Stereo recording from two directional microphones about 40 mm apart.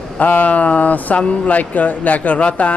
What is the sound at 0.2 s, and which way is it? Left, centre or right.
Speech, left.